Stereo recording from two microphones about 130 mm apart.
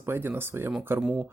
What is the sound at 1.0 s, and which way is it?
Speech, 5° right (ahead or behind).